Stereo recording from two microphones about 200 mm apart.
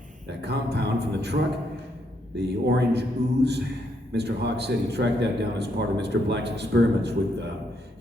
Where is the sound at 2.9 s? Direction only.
55° right (ahead or behind).